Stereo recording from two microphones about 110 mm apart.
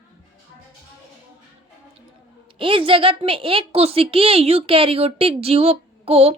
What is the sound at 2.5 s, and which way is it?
A woman's voice, 50° right (ahead or behind).